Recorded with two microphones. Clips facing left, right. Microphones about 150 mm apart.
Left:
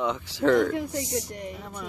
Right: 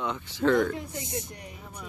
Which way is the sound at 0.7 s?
80° left.